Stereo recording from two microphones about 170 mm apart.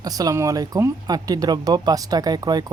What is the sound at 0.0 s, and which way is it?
Speech, 20° right (ahead or behind).